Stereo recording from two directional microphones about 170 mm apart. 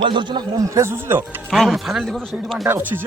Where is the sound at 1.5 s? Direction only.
Centre (ahead or behind).